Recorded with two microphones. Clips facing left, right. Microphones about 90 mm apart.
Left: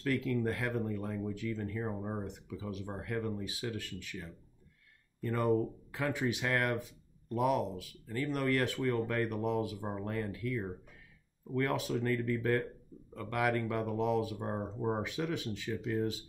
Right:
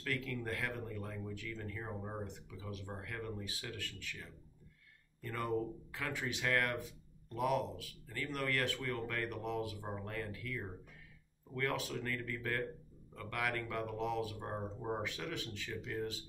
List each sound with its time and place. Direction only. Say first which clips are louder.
0.0 s speech: left 8 dB; 20° left (ahead or behind)
5.3 s speech: left 7 dB; 20° left (ahead or behind)